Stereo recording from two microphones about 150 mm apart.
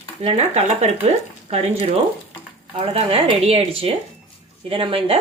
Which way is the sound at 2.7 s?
40° right (ahead or behind).